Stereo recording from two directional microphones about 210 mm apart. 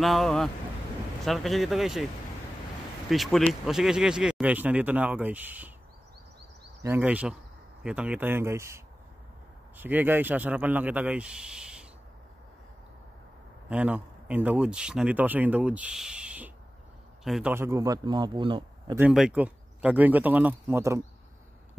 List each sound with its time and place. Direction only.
0.0 s speech: centre (ahead or behind)
3.1 s speech: centre (ahead or behind)
6.8 s speech: 10° right (ahead or behind)
13.7 s speech: 5° right (ahead or behind); by 18.9 s 20° right (ahead or behind)
18.9 s speech: 5° right (ahead or behind)